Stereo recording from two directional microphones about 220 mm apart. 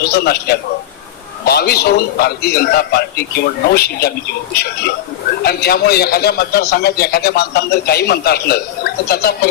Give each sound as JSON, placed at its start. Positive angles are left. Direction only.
{"t": 0.0, "sound": "a man's voice", "side_deg": 45}